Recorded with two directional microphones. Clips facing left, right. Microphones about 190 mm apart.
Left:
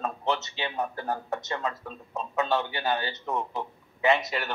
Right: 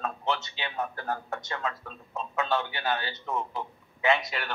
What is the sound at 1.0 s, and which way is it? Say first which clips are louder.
Speech: left 2 dB; 15° left (ahead or behind).